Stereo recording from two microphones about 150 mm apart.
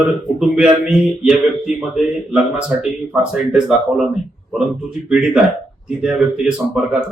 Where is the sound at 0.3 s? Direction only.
5° right (ahead or behind).